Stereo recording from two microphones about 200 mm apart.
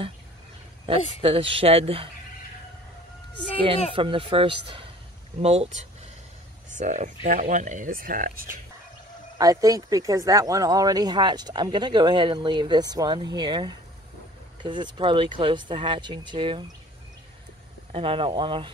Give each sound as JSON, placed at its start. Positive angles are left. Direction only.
{"t": 1.2, "sound": "speech", "side_deg": -30}
{"t": 3.9, "sound": "speech", "side_deg": -25}
{"t": 6.7, "sound": "speech", "side_deg": -35}
{"t": 9.4, "sound": "speech", "side_deg": -15}
{"t": 17.9, "sound": "speech", "side_deg": -25}